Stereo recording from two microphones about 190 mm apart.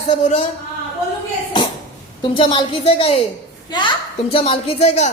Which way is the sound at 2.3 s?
25° left (ahead or behind).